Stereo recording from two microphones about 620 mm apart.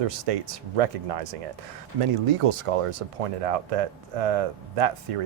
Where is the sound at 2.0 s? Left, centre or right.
Right.